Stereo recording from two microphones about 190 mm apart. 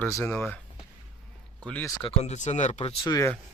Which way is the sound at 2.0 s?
35° left (ahead or behind).